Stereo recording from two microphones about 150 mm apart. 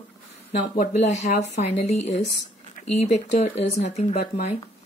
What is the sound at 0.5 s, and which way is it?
Speech, 70° left (ahead or behind).